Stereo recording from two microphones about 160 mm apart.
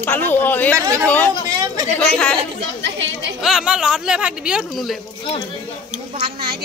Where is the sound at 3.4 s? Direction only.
5° right (ahead or behind).